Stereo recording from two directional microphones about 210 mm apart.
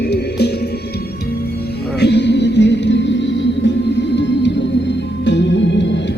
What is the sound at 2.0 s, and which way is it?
Music, 55° left (ahead or behind).